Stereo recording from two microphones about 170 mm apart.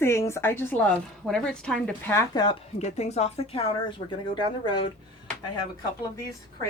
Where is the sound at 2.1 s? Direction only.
25° left (ahead or behind).